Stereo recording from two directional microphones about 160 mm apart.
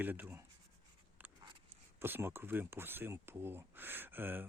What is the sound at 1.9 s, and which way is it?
Speech, 15° right (ahead or behind).